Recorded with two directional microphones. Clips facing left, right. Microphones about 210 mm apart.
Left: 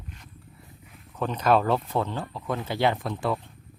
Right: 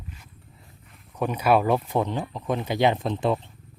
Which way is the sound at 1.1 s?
10° right (ahead or behind).